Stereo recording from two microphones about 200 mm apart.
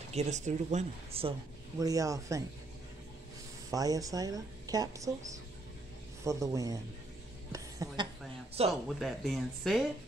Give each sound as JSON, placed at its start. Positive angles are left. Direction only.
{"t": 0.1, "sound": "speech", "side_deg": -35}
{"t": 1.8, "sound": "a woman's voice", "side_deg": -15}
{"t": 3.7, "sound": "a woman's voice", "side_deg": -15}
{"t": 8.8, "sound": "speech", "side_deg": 0}